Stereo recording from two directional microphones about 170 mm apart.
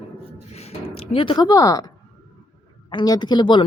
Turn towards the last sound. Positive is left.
turn(degrees=25)  # may be behind; listen again after turning